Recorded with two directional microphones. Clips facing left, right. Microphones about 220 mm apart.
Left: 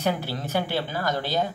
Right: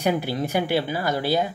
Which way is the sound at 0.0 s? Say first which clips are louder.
Right 4 dB; 15° right (ahead or behind).